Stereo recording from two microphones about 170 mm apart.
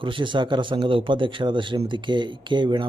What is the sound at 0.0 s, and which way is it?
Speech, 30° right (ahead or behind).